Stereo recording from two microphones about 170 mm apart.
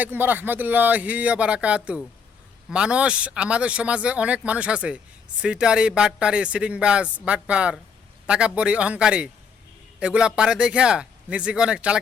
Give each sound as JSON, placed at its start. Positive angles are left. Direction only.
{"t": 0.0, "sound": "speech", "side_deg": -10}